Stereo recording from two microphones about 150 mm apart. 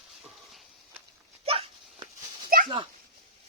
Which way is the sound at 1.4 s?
40° right (ahead or behind).